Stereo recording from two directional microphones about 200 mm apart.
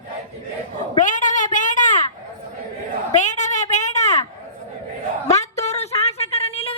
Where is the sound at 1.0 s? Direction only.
40° left (ahead or behind).